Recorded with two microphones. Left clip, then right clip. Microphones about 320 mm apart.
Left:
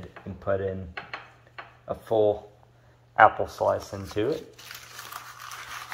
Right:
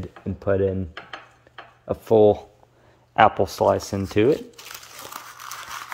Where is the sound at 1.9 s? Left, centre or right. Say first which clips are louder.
Right 7 dB; right.